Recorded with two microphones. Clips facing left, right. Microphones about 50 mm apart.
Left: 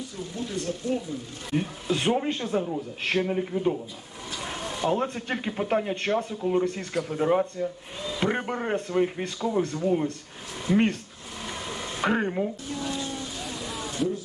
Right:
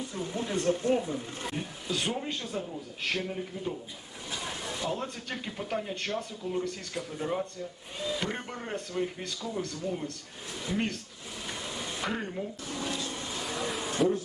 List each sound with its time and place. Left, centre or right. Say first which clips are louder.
0.2 s speech: right 1 dB; right
1.5 s speech: left 9 dB; left
11.7 s a sound: left 9 dB; left